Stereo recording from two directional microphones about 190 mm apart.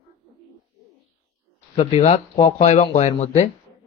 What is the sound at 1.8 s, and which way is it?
Speech, 35° left (ahead or behind).